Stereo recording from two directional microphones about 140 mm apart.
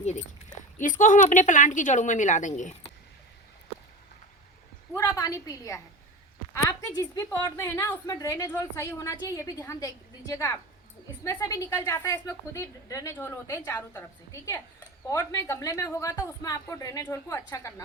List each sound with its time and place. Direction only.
0.0 s speech: 55° left (ahead or behind)
4.9 s a woman's voice: 20° left (ahead or behind)